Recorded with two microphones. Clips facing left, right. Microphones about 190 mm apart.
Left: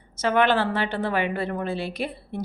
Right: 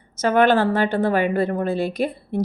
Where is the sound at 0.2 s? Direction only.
45° right (ahead or behind).